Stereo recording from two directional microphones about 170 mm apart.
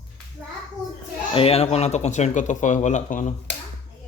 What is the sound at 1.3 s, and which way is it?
Speech, 35° left (ahead or behind).